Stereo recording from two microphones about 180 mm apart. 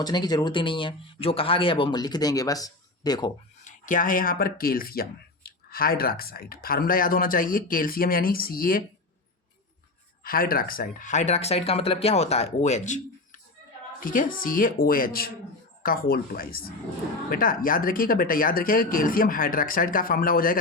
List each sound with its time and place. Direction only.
0.0 s speech: 25° left (ahead or behind)
3.6 s speech: 45° left (ahead or behind)
10.2 s speech: 55° left (ahead or behind)